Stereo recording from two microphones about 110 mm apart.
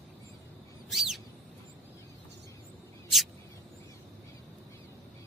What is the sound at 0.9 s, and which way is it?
Bird, centre (ahead or behind).